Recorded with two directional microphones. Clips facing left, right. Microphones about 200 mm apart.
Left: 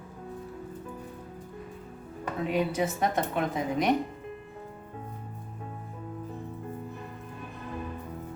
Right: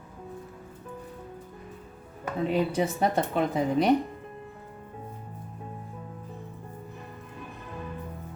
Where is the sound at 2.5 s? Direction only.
30° right (ahead or behind).